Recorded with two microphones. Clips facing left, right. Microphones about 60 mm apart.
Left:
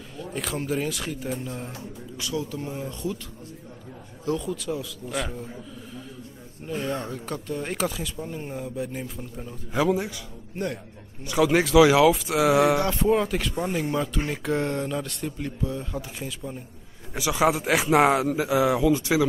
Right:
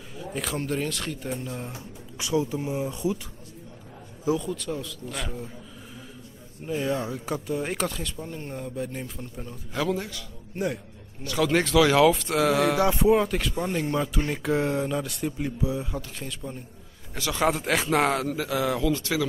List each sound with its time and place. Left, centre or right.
0.2 s speech: centre
2.1 s speech: right
4.4 s speech: centre
6.7 s speech: centre
10.5 s speech: centre
11.2 s a man's voice: centre
12.7 s speech: centre
16.2 s a man's voice: centre